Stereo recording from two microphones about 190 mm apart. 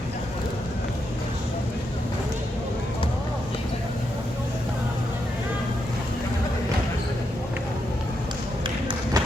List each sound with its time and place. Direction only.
8.6 s run: 25° right (ahead or behind)